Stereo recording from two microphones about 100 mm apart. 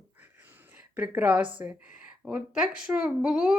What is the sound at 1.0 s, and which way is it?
Speech, 15° right (ahead or behind).